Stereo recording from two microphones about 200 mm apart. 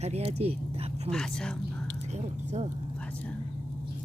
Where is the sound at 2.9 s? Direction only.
5° left (ahead or behind).